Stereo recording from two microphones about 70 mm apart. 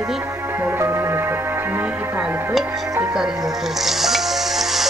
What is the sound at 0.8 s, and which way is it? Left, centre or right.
Music, right.